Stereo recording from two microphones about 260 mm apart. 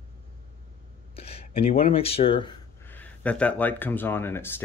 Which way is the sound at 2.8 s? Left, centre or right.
Centre.